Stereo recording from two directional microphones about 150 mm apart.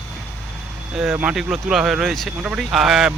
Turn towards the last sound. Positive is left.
turn(degrees=-5)  # may be behind; listen again after turning